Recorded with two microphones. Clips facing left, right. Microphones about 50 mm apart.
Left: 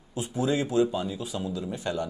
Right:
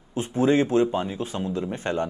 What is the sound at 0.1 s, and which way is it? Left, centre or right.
A man's voice, right.